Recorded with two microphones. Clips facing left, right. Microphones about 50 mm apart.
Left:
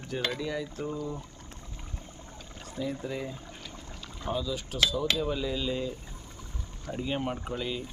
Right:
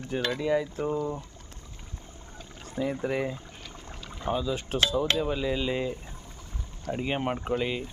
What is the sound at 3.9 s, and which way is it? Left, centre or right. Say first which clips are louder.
Speech: right 4 dB; right.